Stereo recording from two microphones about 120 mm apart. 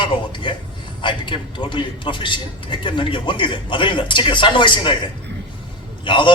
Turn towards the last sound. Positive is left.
turn(degrees=45)  # may be behind; listen again after turning